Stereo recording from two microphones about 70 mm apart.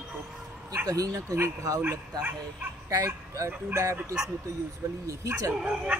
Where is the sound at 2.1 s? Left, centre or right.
Right.